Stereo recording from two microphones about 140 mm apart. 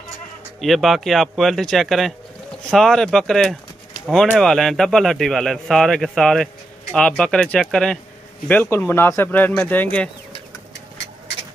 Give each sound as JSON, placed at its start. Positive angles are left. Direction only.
{"t": 0.6, "sound": "a man's voice", "side_deg": 0}